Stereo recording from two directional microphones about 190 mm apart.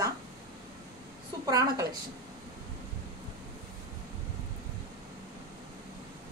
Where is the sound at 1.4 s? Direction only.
20° right (ahead or behind).